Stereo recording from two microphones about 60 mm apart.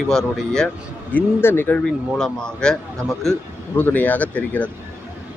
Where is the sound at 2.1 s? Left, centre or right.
Centre.